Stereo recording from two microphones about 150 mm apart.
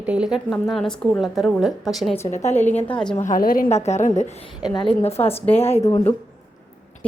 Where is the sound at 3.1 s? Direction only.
60° left (ahead or behind).